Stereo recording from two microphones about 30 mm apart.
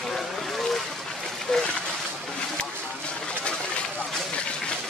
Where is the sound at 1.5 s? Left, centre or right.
Centre.